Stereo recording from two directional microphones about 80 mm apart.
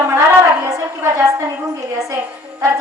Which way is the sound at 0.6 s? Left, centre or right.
Right.